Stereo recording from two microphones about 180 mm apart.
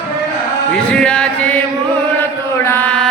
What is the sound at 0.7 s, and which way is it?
Chant, 5° left (ahead or behind).